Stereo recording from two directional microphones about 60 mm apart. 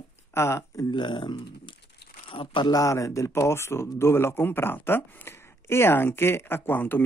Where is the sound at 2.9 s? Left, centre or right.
Left.